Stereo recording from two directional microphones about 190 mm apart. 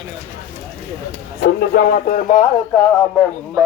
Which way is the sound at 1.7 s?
50° left (ahead or behind).